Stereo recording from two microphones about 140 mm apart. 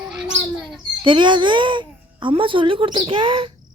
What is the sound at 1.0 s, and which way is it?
Speech, 35° right (ahead or behind).